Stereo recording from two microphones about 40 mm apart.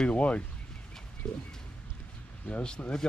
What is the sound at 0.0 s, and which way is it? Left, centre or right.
Speech, left.